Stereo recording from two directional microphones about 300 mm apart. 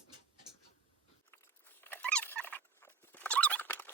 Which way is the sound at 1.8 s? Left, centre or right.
Centre.